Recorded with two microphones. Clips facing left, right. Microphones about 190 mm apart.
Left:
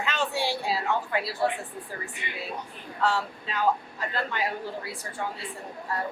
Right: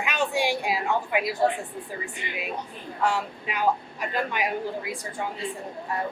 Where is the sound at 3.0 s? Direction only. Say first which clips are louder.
Right 1 dB; 15° right (ahead or behind).